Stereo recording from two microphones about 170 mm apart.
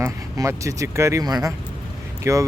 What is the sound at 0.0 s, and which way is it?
Speech, 20° right (ahead or behind).